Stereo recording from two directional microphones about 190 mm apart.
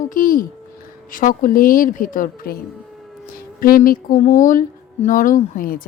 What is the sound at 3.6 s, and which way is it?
Speech, 50° left (ahead or behind).